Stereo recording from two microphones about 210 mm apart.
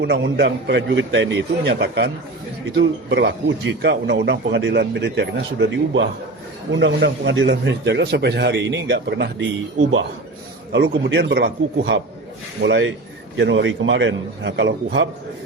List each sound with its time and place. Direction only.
0.0 s a man's voice: 55° right (ahead or behind)
10.7 s a man's voice: 60° right (ahead or behind)